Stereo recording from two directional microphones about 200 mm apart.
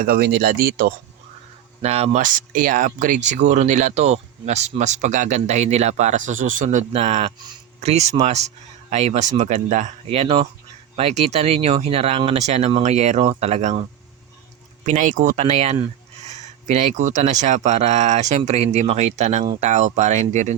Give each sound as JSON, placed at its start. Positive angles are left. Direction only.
{"t": 0.0, "sound": "speech", "side_deg": -50}
{"t": 1.8, "sound": "speech", "side_deg": -30}
{"t": 14.8, "sound": "speech", "side_deg": -40}